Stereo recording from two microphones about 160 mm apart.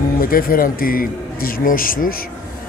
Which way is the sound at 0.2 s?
60° left (ahead or behind).